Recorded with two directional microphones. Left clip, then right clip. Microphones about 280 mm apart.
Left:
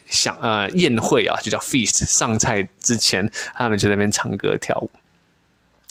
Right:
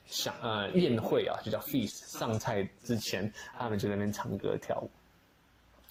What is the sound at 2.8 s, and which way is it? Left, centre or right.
Speech, left.